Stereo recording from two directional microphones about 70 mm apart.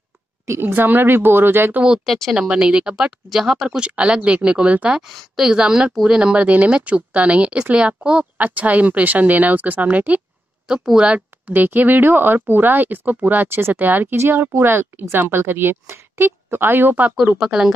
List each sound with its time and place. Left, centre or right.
0.5 s a woman's voice: right
2.0 s speech: centre
2.3 s speech: centre; by 14.0 s right
14.1 s a woman's voice: right
17.4 s speech: centre